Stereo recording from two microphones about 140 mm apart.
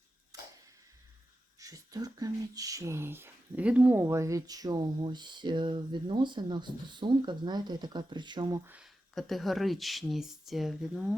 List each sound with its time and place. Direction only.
0.3 s a sound: 25° right (ahead or behind)
1.5 s speech: 25° right (ahead or behind)
4.0 s speech: 20° right (ahead or behind)
8.6 s speech: 10° right (ahead or behind)
9.1 s speech: centre (ahead or behind)